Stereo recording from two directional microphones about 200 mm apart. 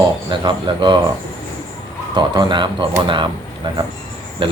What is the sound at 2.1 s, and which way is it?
Speech, 25° right (ahead or behind).